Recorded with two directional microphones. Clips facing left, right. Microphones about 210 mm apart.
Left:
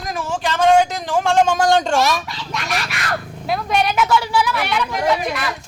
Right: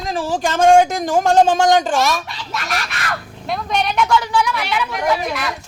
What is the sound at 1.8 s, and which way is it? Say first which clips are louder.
Speech: even; centre (ahead or behind).